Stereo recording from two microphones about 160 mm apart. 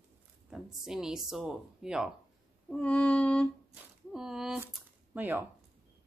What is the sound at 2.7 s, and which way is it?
Mantra, 5° left (ahead or behind).